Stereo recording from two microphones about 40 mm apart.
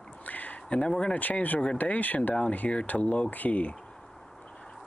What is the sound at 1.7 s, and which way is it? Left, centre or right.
Speech, left.